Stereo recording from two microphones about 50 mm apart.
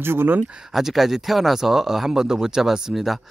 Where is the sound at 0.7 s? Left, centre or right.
Centre.